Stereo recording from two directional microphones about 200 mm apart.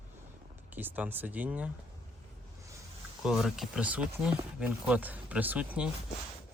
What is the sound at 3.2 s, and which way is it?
Speech, centre (ahead or behind).